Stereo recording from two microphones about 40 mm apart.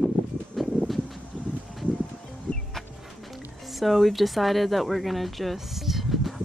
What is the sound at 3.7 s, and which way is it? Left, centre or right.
Speech, centre.